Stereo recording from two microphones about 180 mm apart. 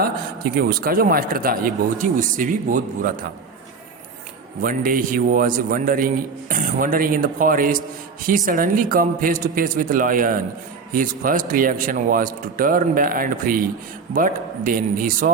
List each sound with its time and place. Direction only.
0.0 s a man's voice: 55° right (ahead or behind)
4.6 s a man's voice: 50° right (ahead or behind)